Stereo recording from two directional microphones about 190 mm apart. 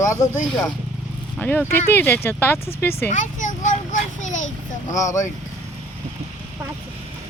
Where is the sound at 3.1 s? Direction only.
40° left (ahead or behind).